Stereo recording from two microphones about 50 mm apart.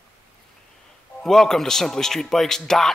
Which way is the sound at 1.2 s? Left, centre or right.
Centre.